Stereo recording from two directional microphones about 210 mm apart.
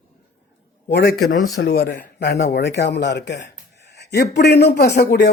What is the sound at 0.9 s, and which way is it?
A man's voice, 50° left (ahead or behind).